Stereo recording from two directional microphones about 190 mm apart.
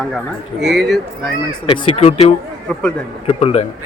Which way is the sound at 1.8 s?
35° left (ahead or behind).